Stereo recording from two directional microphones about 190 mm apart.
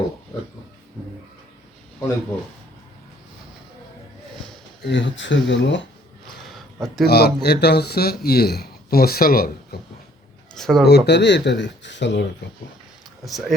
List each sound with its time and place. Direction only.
0.3 s a sound: 20° left (ahead or behind)
4.8 s speech: 65° left (ahead or behind)
7.0 s a man's voice: 55° left (ahead or behind)
10.5 s speech: centre (ahead or behind)
10.8 s a man's voice: 60° left (ahead or behind)
13.2 s speech: centre (ahead or behind)